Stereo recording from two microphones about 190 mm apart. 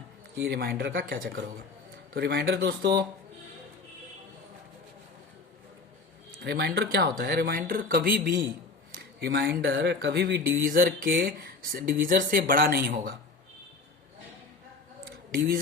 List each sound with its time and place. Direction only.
0.4 s speech: 55° right (ahead or behind)
6.4 s speech: 60° right (ahead or behind)